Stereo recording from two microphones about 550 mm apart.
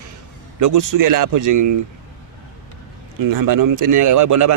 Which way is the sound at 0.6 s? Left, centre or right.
Right.